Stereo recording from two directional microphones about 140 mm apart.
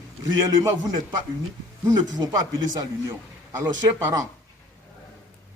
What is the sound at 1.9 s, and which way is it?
Speech, 25° right (ahead or behind).